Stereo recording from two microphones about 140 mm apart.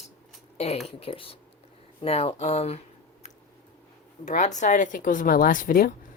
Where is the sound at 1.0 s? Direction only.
40° left (ahead or behind).